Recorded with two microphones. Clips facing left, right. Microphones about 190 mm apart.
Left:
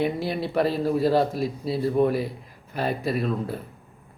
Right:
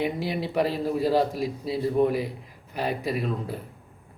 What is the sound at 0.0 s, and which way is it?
A man's voice, 15° right (ahead or behind).